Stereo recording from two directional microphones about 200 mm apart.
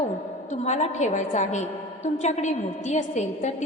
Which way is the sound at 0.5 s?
35° left (ahead or behind).